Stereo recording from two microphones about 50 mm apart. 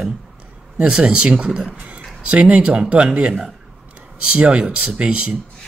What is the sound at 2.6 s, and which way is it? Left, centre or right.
Speech, centre.